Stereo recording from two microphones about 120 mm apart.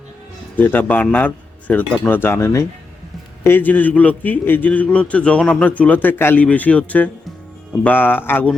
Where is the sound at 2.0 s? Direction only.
15° left (ahead or behind).